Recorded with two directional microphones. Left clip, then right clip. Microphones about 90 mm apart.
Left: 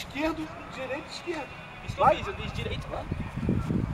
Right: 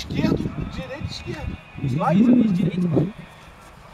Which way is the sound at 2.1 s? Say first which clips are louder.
Right 15 dB; centre (ahead or behind).